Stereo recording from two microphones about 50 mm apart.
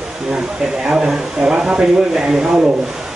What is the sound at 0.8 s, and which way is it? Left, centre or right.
Speech, centre.